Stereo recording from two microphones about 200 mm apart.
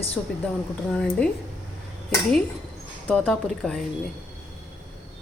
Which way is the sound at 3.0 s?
5° left (ahead or behind).